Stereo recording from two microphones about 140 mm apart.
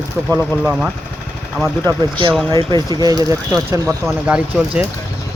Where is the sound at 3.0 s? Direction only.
25° right (ahead or behind).